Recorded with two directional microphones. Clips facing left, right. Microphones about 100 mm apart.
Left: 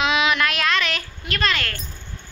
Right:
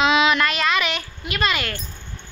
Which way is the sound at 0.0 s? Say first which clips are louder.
Right 3 dB; 5° left (ahead or behind).